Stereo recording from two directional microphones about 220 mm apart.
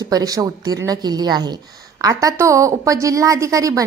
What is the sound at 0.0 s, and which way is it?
Speech, 15° right (ahead or behind).